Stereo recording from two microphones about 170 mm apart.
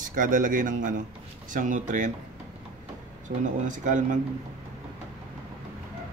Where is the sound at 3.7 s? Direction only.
50° right (ahead or behind).